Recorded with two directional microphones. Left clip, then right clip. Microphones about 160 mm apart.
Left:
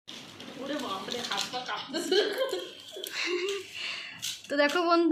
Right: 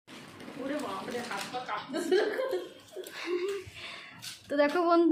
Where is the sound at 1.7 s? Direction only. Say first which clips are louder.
Even; 25° right (ahead or behind).